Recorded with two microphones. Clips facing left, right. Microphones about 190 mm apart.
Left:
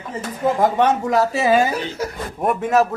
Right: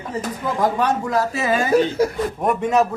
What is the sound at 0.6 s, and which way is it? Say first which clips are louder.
Speech: left 1 dB; 20° left (ahead or behind).